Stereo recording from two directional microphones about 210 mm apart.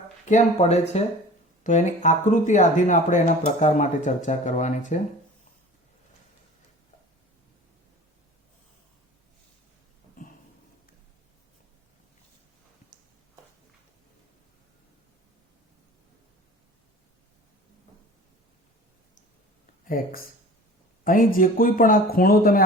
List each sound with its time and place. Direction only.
0.3 s speech: 35° left (ahead or behind)
19.8 s speech: 40° left (ahead or behind)